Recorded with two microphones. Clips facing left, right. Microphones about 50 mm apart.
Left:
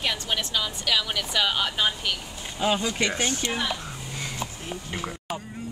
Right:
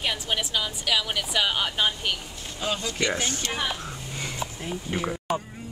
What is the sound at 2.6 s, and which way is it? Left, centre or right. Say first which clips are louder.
Speech: left 4 dB; centre.